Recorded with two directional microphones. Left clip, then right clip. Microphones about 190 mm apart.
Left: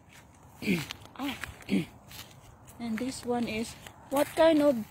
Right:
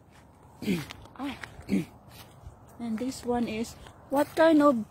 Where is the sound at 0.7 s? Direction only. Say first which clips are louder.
Left 2 dB; 50° left (ahead or behind).